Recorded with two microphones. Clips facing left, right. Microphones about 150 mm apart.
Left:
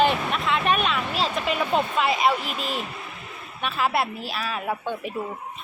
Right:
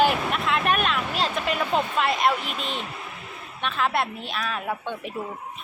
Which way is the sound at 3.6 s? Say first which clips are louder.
Left 1 dB; 5° left (ahead or behind).